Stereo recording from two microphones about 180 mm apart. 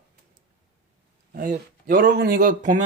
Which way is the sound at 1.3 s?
50° right (ahead or behind).